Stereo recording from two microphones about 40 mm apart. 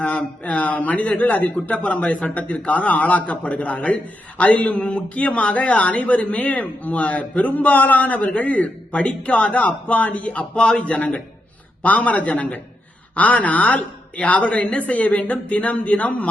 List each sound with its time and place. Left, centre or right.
0.0 s a man's voice: left
10.9 s a man's voice: left